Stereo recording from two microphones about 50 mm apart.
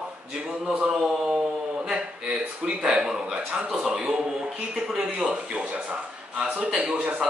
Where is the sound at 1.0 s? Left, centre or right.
Centre.